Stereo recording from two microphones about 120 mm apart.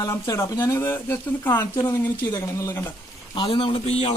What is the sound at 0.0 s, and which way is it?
Speech, 25° left (ahead or behind).